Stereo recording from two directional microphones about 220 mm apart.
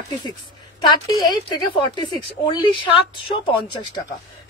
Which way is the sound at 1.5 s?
20° left (ahead or behind).